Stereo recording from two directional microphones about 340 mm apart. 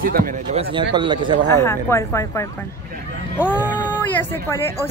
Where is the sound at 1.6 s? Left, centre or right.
Centre.